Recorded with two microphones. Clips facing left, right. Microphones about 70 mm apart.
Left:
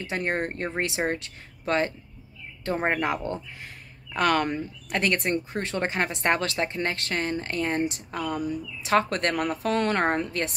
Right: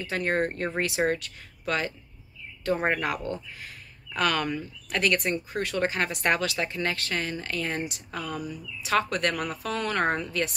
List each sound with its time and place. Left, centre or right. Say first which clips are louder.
0.1 s speech: right 1 dB; left
4.8 s a woman's voice: even; left
8.2 s speech: left 5 dB; left
8.8 s a woman's voice: left 2 dB; left